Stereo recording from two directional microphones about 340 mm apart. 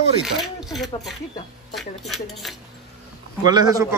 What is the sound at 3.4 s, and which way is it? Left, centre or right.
Speech, centre.